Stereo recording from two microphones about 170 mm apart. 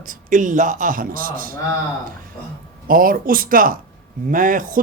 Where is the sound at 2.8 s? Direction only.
55° right (ahead or behind).